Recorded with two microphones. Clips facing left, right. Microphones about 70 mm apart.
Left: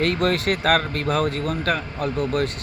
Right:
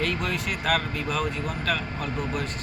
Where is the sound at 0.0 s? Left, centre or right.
Left.